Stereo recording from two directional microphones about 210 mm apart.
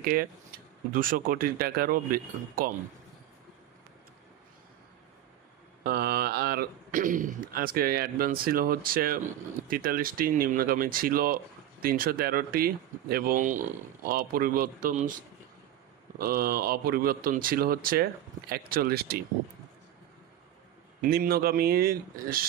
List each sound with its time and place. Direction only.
0.0 s speech: 45° right (ahead or behind)
5.9 s speech: 45° right (ahead or behind)
16.2 s speech: 45° right (ahead or behind)
21.1 s speech: 45° right (ahead or behind)